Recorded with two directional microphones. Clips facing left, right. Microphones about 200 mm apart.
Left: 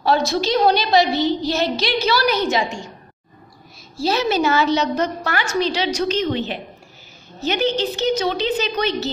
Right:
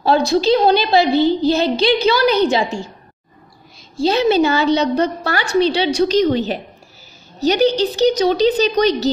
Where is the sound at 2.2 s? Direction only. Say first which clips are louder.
Right 5 dB; 30° right (ahead or behind).